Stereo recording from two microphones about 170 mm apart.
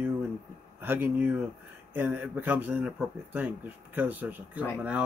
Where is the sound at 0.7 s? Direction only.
10° right (ahead or behind).